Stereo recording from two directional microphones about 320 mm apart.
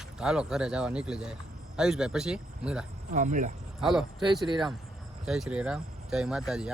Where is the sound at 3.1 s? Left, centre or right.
Right.